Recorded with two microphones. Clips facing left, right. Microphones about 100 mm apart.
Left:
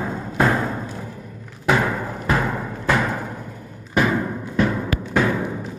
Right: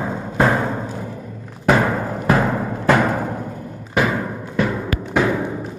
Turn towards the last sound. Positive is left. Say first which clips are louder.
# right 2 dB
turn(degrees=-10)  # may be behind; listen again after turning